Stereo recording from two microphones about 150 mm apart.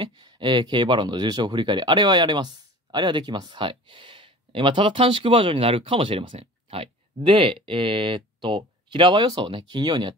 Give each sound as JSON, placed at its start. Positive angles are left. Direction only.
{"t": 0.0, "sound": "speech", "side_deg": -30}